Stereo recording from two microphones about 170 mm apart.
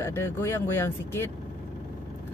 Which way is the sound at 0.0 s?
15° left (ahead or behind).